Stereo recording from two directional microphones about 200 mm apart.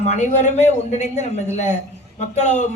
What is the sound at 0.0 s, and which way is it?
A woman's voice, 35° left (ahead or behind).